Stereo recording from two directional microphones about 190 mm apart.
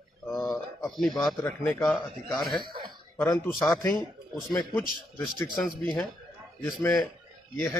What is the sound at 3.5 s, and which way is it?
Speech, centre (ahead or behind).